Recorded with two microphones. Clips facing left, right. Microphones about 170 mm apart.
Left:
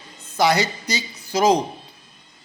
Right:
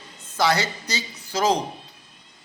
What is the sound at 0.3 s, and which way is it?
Speech, 15° left (ahead or behind).